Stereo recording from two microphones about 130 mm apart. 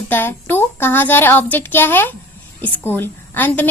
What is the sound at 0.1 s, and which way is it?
A child's voice, 15° left (ahead or behind).